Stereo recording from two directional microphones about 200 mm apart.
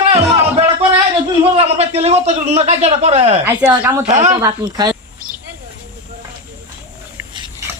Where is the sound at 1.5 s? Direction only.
30° right (ahead or behind).